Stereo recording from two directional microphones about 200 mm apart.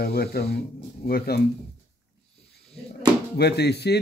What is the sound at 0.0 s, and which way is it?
Speech, 50° left (ahead or behind).